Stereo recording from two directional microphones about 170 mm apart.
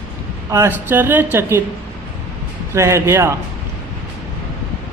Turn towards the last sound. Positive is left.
turn(degrees=-15)  # may be behind; listen again after turning